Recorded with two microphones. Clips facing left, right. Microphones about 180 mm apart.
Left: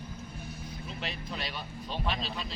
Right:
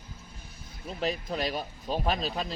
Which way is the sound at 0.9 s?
40° right (ahead or behind).